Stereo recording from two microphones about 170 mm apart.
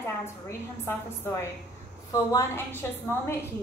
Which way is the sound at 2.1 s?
20° left (ahead or behind).